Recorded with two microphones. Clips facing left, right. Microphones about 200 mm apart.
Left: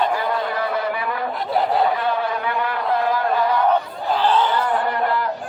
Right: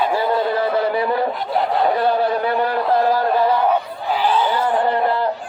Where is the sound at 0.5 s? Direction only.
30° right (ahead or behind).